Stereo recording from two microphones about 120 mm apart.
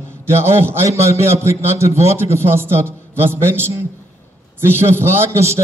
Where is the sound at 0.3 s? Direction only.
20° right (ahead or behind).